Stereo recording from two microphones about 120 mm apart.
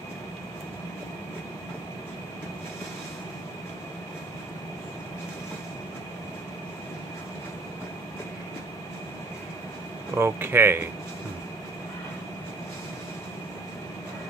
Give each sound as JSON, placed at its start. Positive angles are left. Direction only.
{"t": 10.1, "sound": "speech", "side_deg": -20}